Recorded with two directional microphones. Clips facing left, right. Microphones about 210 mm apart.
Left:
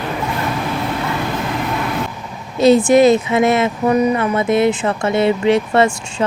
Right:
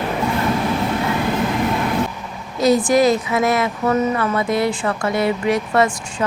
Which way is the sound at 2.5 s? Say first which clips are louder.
Left 4 dB; 25° left (ahead or behind).